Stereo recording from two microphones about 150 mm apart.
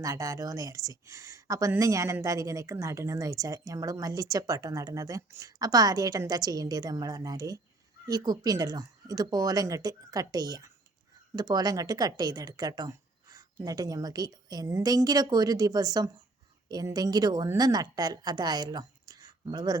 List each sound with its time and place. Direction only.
0.0 s a woman's voice: 20° right (ahead or behind)